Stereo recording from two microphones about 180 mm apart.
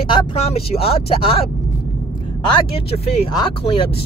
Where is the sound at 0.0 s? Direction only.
25° left (ahead or behind).